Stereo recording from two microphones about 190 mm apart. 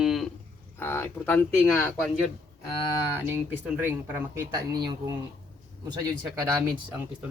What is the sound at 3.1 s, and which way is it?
Speech, 10° right (ahead or behind).